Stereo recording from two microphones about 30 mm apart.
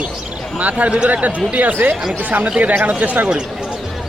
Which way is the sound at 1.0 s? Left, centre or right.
Right.